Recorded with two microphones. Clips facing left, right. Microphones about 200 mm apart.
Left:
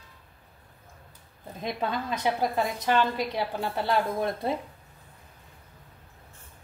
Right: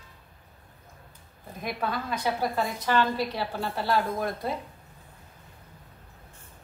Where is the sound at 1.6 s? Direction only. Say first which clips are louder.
Left 1 dB; 20° left (ahead or behind).